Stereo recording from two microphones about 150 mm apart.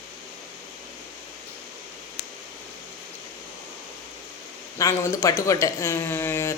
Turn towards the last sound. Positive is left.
turn(degrees=15)  # may be behind; listen again after turning